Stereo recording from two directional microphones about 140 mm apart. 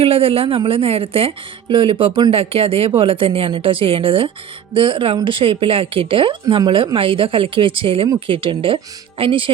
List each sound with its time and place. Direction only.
0.0 s a woman's voice: 45° right (ahead or behind)